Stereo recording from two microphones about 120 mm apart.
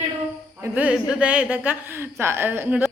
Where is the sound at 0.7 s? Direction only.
10° right (ahead or behind).